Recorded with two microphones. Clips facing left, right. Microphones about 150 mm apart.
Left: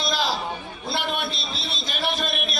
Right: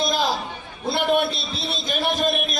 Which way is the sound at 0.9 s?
50° right (ahead or behind).